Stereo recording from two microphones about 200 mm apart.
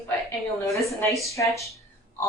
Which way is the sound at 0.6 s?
15° left (ahead or behind).